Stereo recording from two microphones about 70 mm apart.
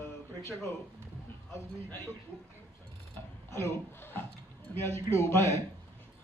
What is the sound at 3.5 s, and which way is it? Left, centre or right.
A man's voice, left.